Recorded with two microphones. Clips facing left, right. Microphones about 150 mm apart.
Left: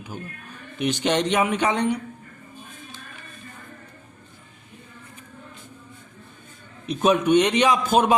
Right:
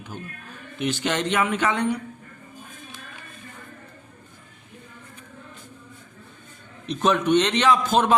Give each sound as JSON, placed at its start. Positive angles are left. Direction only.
{"t": 0.8, "sound": "speech", "side_deg": 15}
{"t": 6.8, "sound": "a man's voice", "side_deg": 10}